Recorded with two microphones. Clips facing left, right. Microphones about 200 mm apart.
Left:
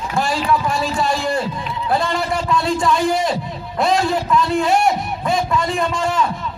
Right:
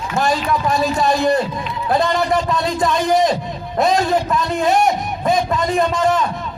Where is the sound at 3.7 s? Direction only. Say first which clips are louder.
Right 2 dB; 40° right (ahead or behind).